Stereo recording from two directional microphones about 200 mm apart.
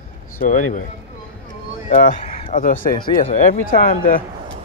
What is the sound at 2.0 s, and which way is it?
Speech, 40° left (ahead or behind).